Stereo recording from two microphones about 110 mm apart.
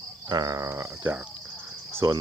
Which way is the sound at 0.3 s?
35° right (ahead or behind).